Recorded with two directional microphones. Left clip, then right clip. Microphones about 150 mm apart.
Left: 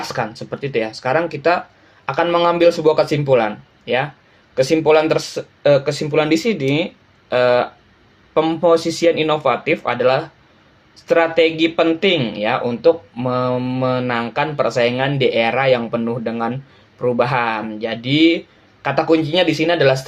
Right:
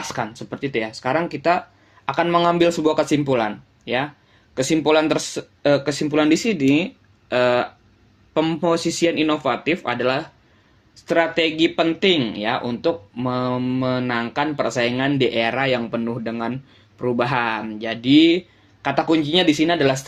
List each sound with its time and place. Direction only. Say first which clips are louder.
0.1 s speech: left 4 dB; 45° right (ahead or behind)
4.5 s speech: left 4 dB; 50° right (ahead or behind)